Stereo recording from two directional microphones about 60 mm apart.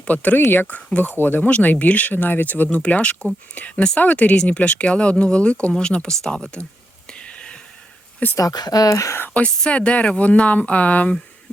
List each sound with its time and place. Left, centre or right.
0.0 s speech: left
0.8 s speech: centre
1.2 s speech: left; by 6.7 s centre
7.1 s whispering: centre
8.4 s speech: left
9.6 s speech: centre